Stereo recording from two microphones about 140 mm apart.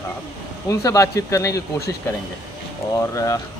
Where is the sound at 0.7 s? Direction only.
20° left (ahead or behind).